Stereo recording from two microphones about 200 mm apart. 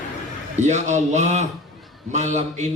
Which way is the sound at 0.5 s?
35° right (ahead or behind).